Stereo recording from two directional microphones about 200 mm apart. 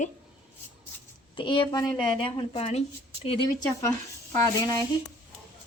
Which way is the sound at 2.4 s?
30° left (ahead or behind).